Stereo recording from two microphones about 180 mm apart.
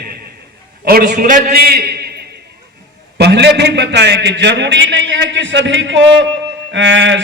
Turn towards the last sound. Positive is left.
turn(degrees=-90)